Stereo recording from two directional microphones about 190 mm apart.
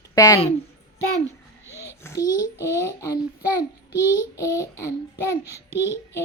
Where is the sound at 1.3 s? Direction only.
15° right (ahead or behind).